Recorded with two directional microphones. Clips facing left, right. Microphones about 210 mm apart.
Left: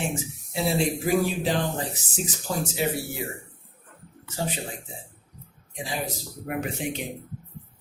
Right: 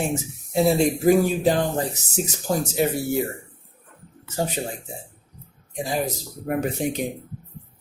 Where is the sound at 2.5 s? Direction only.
45° right (ahead or behind).